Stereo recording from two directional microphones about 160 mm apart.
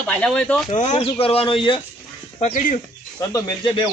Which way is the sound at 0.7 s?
45° left (ahead or behind).